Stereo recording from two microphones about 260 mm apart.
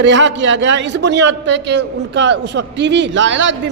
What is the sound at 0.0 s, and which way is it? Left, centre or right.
A man's voice, right.